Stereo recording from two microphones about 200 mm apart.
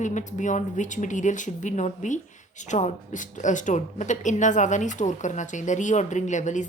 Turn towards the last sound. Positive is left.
turn(degrees=35)  # may be behind; listen again after turning